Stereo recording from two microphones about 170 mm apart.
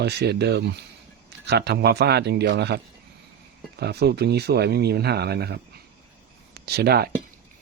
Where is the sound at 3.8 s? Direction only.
75° right (ahead or behind).